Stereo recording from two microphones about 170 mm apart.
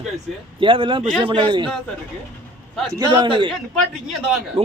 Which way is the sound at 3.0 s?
25° right (ahead or behind).